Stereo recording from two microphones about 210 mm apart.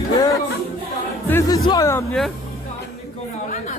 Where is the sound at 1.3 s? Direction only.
15° left (ahead or behind).